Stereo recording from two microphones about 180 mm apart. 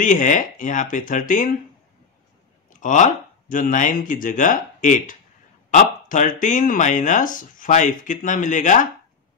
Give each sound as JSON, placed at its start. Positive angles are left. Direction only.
{"t": 0.0, "sound": "speech", "side_deg": 45}
{"t": 2.8, "sound": "speech", "side_deg": 45}